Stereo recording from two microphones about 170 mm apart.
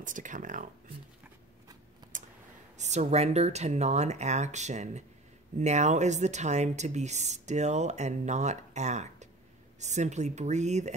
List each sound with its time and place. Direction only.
0.0 s speech: 50° right (ahead or behind)
2.8 s speech: 40° right (ahead or behind)